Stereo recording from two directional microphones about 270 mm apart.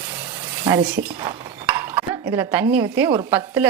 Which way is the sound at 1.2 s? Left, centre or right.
Centre.